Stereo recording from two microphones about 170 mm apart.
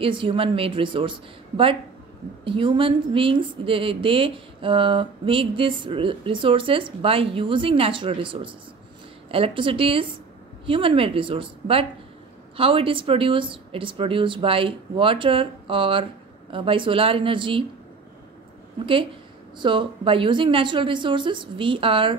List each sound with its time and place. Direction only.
0.0 s a woman's voice: 30° right (ahead or behind)
2.4 s a woman's voice: 30° right (ahead or behind)
19.6 s speech: 30° right (ahead or behind)